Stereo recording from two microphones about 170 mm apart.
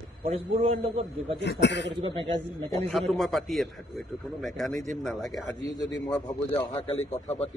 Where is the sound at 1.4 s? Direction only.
90° left.